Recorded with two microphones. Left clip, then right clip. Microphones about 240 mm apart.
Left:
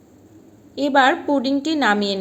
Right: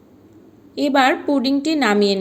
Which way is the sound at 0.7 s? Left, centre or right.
Right.